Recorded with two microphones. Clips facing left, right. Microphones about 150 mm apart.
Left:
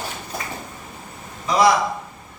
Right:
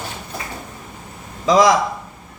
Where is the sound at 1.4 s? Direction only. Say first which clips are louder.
Right 3 dB; 90° right.